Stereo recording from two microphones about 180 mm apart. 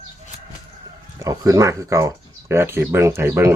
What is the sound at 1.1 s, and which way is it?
Speech, 15° right (ahead or behind).